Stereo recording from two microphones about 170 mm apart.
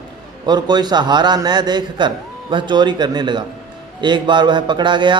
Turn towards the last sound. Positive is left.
turn(degrees=-25)  # may be behind; listen again after turning